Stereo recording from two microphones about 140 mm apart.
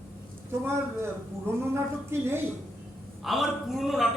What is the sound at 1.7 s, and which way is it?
Speech, 15° right (ahead or behind).